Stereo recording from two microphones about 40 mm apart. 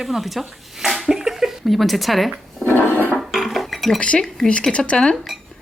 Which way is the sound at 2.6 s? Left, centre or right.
Left.